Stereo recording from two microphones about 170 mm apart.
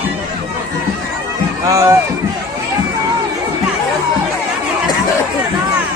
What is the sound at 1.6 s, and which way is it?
Speech, 20° right (ahead or behind).